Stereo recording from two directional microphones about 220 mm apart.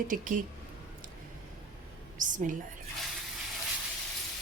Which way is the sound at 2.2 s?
35° right (ahead or behind).